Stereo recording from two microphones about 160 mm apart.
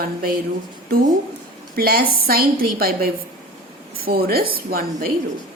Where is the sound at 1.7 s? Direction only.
70° right (ahead or behind).